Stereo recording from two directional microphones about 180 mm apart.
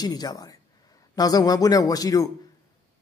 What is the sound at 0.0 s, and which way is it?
Speech, 20° left (ahead or behind).